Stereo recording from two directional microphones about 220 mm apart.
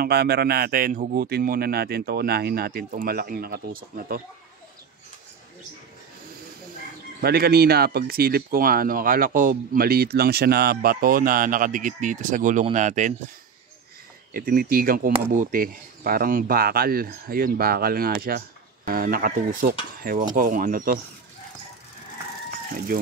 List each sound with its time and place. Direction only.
0.0 s a man's voice: 45° right (ahead or behind)
7.2 s speech: 45° right (ahead or behind)
14.3 s a man's voice: 40° right (ahead or behind)